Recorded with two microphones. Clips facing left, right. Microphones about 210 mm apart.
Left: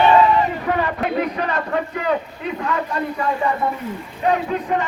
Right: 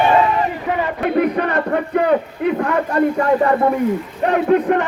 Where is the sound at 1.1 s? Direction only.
60° right (ahead or behind).